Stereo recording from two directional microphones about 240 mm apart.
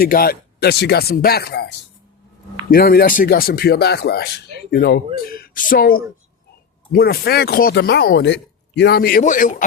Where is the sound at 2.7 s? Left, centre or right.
Left.